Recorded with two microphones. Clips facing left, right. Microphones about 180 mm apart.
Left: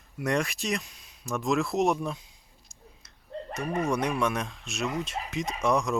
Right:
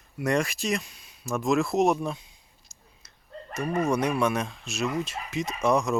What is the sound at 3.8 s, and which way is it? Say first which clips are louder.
Speech: right 3 dB; centre (ahead or behind).